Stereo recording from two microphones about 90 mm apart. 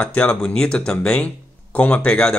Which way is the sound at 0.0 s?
10° left (ahead or behind).